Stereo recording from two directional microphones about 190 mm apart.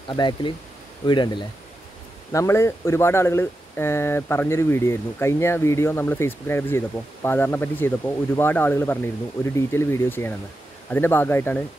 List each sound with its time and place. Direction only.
0.1 s speech: 25° left (ahead or behind)